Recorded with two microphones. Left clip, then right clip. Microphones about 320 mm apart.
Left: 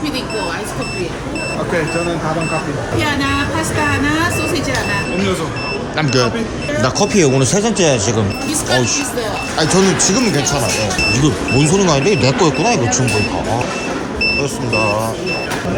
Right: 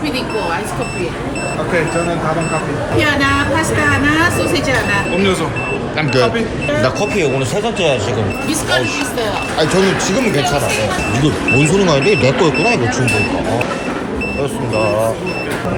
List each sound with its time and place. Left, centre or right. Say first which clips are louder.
4.2 s speech: right 3 dB; centre
6.8 s speech: left 4 dB; centre
9.6 s speech: left 1 dB; centre